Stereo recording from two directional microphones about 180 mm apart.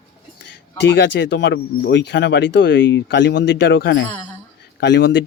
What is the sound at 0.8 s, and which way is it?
Speech, 80° left.